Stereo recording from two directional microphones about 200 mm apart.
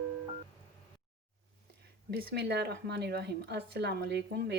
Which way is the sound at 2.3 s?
55° right (ahead or behind).